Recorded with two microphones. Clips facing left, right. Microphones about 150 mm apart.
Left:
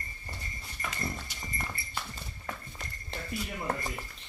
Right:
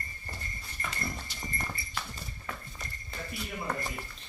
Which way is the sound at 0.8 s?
15° left (ahead or behind).